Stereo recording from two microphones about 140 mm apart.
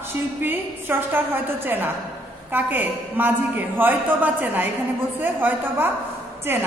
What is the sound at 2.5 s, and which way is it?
A woman's voice, 15° right (ahead or behind).